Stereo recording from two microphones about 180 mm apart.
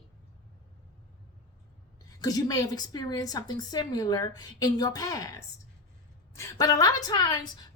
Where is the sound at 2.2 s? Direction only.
20° left (ahead or behind).